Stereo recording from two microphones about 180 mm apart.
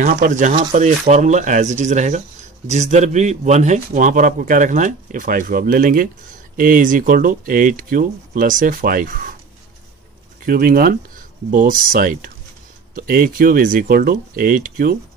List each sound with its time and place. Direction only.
0.0 s a man's voice: 50° right (ahead or behind)
10.4 s a man's voice: 55° right (ahead or behind)